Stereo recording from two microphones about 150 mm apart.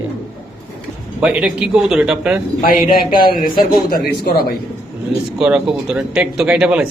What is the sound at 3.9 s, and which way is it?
Speech, 80° left.